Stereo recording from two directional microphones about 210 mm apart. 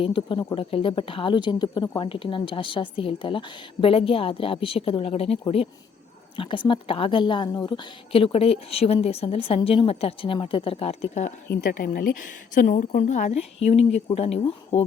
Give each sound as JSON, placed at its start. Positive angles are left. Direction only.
{"t": 0.0, "sound": "a woman's voice", "side_deg": 25}